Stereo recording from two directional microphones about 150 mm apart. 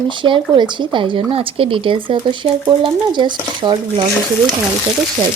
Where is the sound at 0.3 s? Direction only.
35° right (ahead or behind).